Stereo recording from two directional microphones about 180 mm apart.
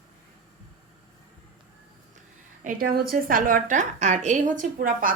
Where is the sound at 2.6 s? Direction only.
55° right (ahead or behind).